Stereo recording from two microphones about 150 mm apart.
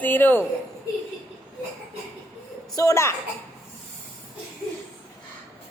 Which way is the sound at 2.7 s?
20° left (ahead or behind).